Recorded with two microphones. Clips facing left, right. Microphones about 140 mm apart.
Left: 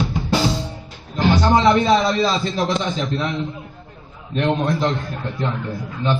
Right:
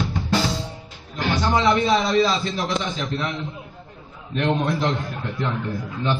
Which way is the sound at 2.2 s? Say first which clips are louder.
Left 3 dB; 30° left (ahead or behind).